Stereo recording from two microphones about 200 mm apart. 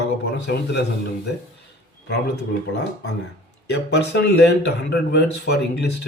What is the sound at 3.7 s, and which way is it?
A man's voice, 60° left (ahead or behind).